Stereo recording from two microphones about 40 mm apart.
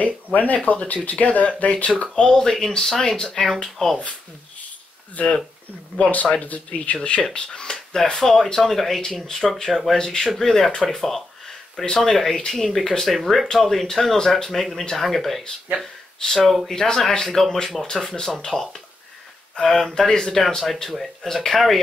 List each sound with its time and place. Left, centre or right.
0.0 s speech: left
2.3 s speech: centre
5.2 s speech: left
7.4 s speech: centre
7.7 s a sound: centre
8.2 s speech: centre
9.9 s speech: centre
11.1 s a sound: centre
12.0 s speech: centre
13.2 s speech: centre
16.2 s speech: centre
18.0 s speech: centre
20.4 s speech: centre